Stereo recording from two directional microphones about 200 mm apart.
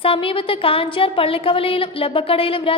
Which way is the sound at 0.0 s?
25° left (ahead or behind).